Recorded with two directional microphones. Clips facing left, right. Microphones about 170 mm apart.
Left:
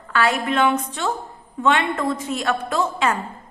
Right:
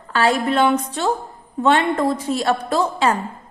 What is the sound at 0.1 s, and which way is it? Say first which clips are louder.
A woman's voice: right 3 dB; 35° right (ahead or behind).